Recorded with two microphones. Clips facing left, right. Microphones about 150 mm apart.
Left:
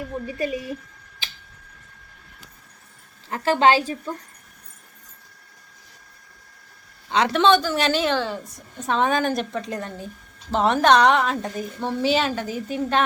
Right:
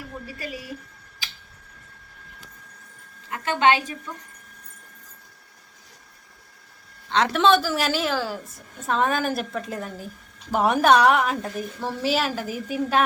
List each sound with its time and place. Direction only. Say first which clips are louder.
0.3 s speech: left 8 dB; 20° left (ahead or behind)
3.2 s a woman's voice: left 3 dB; 30° left (ahead or behind)
7.1 s a woman's voice: left 1 dB; centre (ahead or behind)